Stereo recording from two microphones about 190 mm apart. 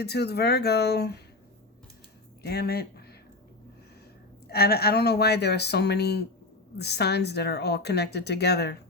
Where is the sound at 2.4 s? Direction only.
55° left (ahead or behind).